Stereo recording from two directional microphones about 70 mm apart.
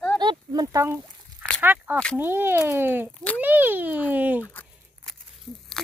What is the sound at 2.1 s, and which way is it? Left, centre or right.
Speech, right.